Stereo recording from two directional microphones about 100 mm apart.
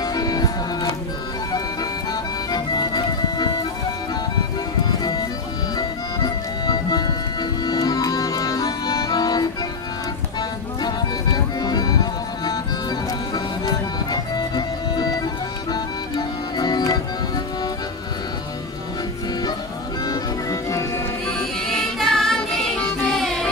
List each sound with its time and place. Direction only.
0.0 s music: 40° left (ahead or behind)
2.5 s music: 45° left (ahead or behind)
4.8 s music: 45° left (ahead or behind)
10.8 s music: 45° left (ahead or behind)
20.1 s music: 35° left (ahead or behind)
21.5 s music: centre (ahead or behind)